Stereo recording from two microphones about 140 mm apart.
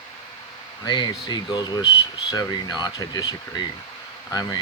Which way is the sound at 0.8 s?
30° left (ahead or behind).